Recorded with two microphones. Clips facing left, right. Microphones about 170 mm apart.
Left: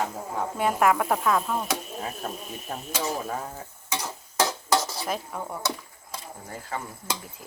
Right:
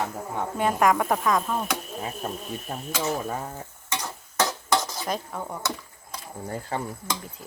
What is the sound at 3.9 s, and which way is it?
Tick-tock, 5° left (ahead or behind).